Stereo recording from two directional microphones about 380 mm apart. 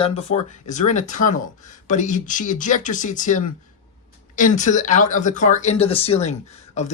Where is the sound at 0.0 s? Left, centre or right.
Centre.